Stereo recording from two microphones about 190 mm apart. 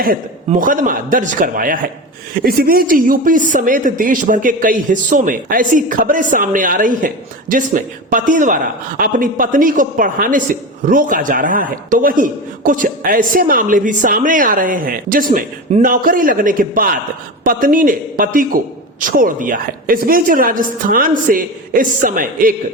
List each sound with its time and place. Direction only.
0.6 s speech: 45° right (ahead or behind)